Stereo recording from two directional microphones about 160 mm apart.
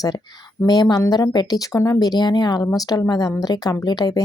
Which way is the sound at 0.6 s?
25° left (ahead or behind).